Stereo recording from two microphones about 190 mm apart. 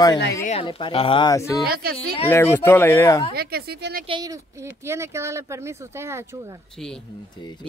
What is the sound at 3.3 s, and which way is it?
Speech, 55° right (ahead or behind).